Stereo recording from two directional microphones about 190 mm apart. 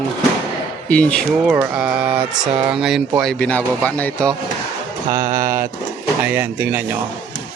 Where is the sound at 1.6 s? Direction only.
5° right (ahead or behind).